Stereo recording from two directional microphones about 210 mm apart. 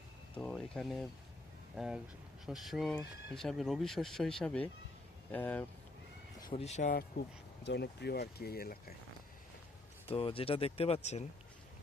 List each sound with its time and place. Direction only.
0.3 s speech: 5° left (ahead or behind)
6.6 s speech: 35° left (ahead or behind)
7.6 s speech: 55° left (ahead or behind)
10.1 s speech: 25° left (ahead or behind)